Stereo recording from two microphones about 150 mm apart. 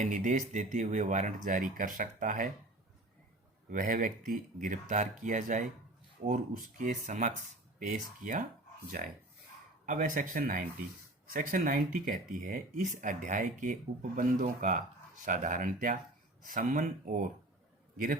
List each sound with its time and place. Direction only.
0.0 s speech: 55° right (ahead or behind)
3.7 s speech: 65° right (ahead or behind)
9.8 s speech: 60° right (ahead or behind)
17.9 s a man's voice: 75° right (ahead or behind)